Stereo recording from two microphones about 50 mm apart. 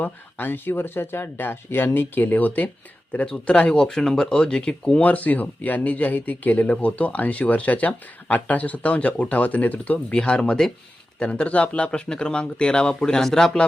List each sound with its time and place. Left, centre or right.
0.0 s speech: left; by 4.9 s centre
4.9 s speech: left; by 13.5 s centre